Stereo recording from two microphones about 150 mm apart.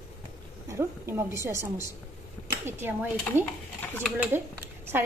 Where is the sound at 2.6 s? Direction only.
15° right (ahead or behind).